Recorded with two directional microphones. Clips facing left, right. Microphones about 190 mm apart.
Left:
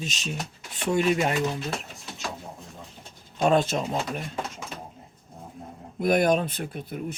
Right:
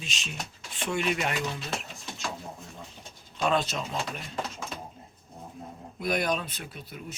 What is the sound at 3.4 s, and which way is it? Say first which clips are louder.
Speech: left 5 dB; 45° left (ahead or behind).